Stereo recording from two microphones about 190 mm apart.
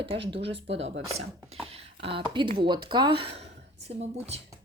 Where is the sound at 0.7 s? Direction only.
70° right (ahead or behind).